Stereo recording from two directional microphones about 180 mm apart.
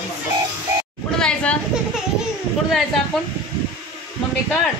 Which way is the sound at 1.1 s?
5° left (ahead or behind).